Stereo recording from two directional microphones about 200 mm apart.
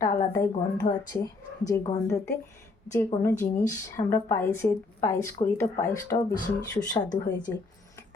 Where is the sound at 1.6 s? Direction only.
15° left (ahead or behind).